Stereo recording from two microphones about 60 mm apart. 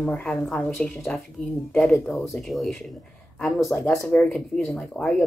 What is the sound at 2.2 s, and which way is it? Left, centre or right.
Speech, centre.